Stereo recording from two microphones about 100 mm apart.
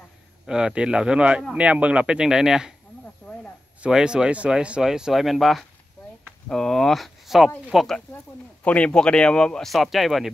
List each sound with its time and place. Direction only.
0.5 s speech: 10° right (ahead or behind)
3.8 s speech: 10° right (ahead or behind)